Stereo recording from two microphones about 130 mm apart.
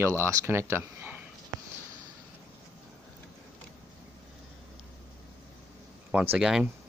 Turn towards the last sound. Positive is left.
turn(degrees=-5)  # may be behind; listen again after turning